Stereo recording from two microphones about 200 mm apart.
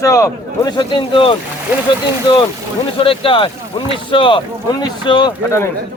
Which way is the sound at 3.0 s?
25° left (ahead or behind).